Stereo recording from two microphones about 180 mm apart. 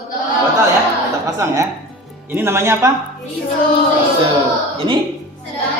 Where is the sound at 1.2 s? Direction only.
20° right (ahead or behind).